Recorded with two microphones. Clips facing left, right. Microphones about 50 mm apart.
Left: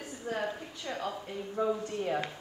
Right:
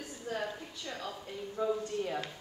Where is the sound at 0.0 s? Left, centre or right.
Left.